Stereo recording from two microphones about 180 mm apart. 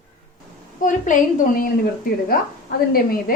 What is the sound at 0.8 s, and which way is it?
Speech, 45° left (ahead or behind).